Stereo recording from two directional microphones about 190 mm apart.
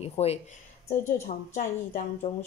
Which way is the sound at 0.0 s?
35° left (ahead or behind).